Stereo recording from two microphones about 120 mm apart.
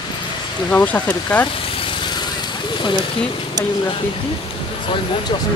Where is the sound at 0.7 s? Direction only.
15° left (ahead or behind).